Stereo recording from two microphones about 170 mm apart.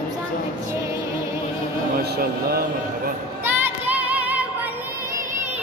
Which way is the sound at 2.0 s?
65° right (ahead or behind).